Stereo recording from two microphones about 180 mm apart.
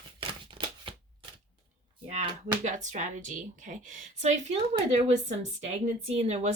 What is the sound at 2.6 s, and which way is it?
Speech, 45° right (ahead or behind).